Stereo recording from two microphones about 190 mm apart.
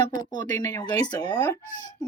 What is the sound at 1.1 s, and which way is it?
Speech, 20° left (ahead or behind).